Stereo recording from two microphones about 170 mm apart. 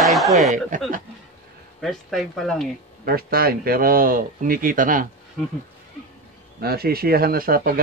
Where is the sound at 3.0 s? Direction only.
60° right (ahead or behind).